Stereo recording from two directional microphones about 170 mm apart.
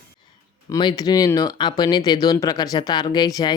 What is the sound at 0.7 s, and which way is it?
Speech, 25° left (ahead or behind).